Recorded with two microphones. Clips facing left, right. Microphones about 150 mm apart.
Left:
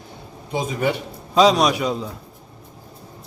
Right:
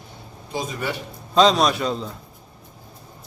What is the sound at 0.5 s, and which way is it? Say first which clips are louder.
Speech: left 5 dB; 20° left (ahead or behind).